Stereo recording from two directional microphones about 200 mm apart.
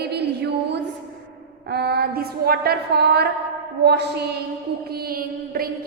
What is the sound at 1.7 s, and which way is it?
A woman's voice, 55° right (ahead or behind).